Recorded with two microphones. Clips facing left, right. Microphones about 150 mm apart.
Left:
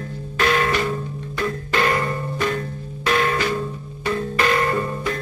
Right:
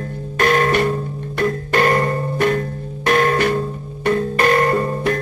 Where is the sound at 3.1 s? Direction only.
40° right (ahead or behind).